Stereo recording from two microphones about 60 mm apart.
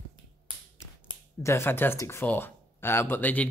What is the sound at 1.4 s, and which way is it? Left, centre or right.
Speech, left.